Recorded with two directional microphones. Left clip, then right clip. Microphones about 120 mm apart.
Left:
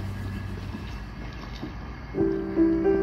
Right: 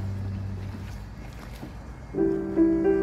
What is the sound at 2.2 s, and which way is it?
Music, 10° right (ahead or behind).